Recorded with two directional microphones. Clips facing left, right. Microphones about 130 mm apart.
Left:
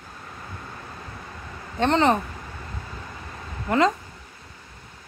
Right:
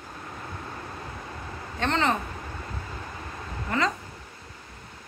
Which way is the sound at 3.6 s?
45° left (ahead or behind).